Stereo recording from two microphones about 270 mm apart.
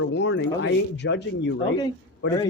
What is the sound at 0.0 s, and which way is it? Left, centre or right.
Speech, left.